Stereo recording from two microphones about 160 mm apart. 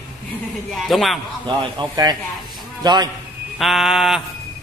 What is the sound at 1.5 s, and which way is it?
A man's voice, 25° right (ahead or behind).